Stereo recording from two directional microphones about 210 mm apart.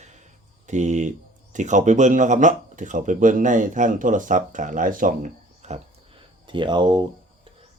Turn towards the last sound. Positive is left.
turn(degrees=-20)  # may be behind; listen again after turning